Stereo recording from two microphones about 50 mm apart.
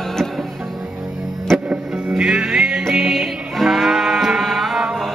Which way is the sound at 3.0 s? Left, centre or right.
Centre.